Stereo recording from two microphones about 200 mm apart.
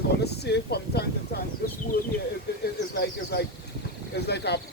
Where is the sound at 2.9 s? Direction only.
55° left (ahead or behind).